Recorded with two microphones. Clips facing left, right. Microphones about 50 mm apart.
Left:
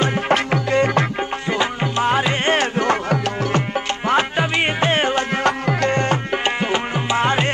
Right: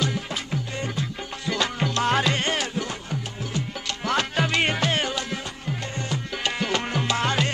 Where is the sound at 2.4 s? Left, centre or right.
Left.